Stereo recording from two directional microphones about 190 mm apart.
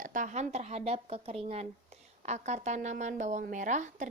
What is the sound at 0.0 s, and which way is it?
A woman's voice, 40° right (ahead or behind).